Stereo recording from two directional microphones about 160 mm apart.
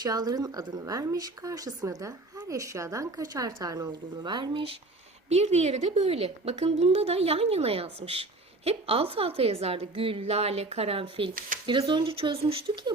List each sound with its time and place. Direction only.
0.0 s speech: 25° right (ahead or behind)
5.3 s a woman's voice: 45° right (ahead or behind)